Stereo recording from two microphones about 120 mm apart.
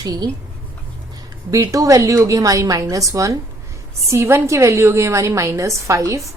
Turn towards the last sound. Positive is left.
turn(degrees=-25)  # may be behind; listen again after turning